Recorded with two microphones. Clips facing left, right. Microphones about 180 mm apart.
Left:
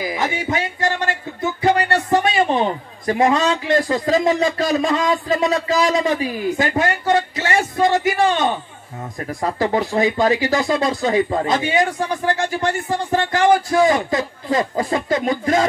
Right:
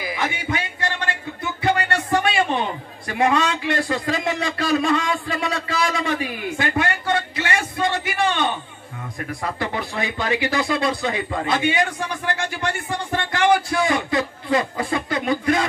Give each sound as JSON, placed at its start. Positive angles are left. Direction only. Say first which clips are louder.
{"t": 0.2, "sound": "music", "louder": "left 3 dB", "side_deg": 40}
{"t": 3.1, "sound": "speech", "louder": "left 4 dB", "side_deg": 35}